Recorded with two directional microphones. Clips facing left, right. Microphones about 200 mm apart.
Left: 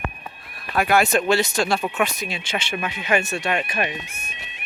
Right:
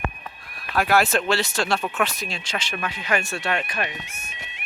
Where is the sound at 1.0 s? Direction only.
15° left (ahead or behind).